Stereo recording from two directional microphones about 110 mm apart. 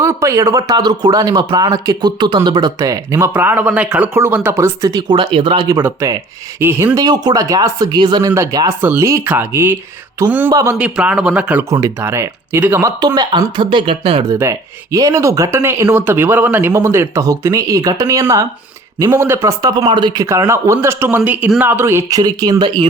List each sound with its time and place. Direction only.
0.0 s a man's voice: 25° right (ahead or behind)
4.5 s speech: 30° right (ahead or behind); by 5.6 s 50° right (ahead or behind)
5.7 s speech: 20° right (ahead or behind)
6.9 s a man's voice: 40° right (ahead or behind)
8.8 s speech: 20° right (ahead or behind)
10.5 s speech: 30° right (ahead or behind)
10.8 s speech: 10° right (ahead or behind)
11.9 s speech: 20° right (ahead or behind)
13.1 s speech: 40° right (ahead or behind)
14.9 s speech: 30° right (ahead or behind)
19.7 s a man's voice: 45° right (ahead or behind)
20.2 s speech: 25° right (ahead or behind)
22.2 s a man's voice: 35° right (ahead or behind)